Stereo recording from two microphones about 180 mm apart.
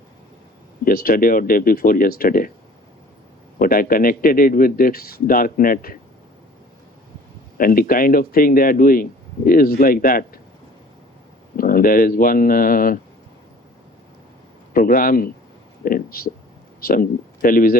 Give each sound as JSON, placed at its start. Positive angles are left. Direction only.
{"t": 0.9, "sound": "speech", "side_deg": 55}
{"t": 3.6, "sound": "speech", "side_deg": 50}
{"t": 7.6, "sound": "speech", "side_deg": 55}
{"t": 11.5, "sound": "speech", "side_deg": 50}
{"t": 14.7, "sound": "speech", "side_deg": 55}